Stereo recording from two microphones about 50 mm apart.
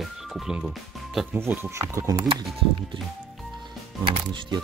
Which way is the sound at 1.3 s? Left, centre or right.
Right.